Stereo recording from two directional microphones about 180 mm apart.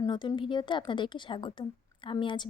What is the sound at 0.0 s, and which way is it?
A woman's voice, 25° left (ahead or behind).